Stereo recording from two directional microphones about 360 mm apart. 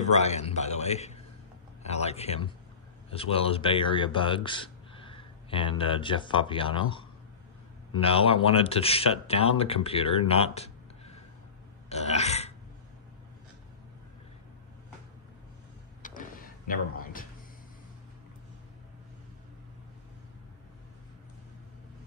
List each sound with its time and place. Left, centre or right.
0.0 s a man's voice: centre
11.9 s burping: centre
16.0 s a sound: left